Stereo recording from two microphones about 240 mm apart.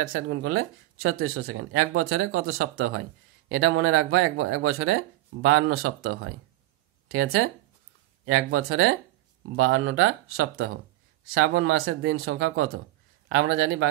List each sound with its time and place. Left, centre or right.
0.0 s speech: right